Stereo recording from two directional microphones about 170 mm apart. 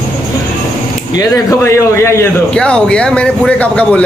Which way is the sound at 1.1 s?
20° left (ahead or behind).